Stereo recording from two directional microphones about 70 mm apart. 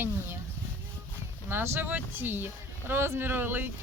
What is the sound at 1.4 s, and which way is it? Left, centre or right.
Speech, right.